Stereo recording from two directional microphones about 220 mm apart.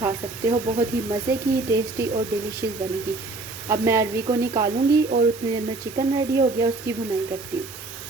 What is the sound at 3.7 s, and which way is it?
A woman's voice, 10° right (ahead or behind).